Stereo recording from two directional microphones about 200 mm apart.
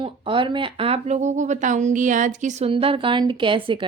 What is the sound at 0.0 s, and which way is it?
Speech, 25° right (ahead or behind).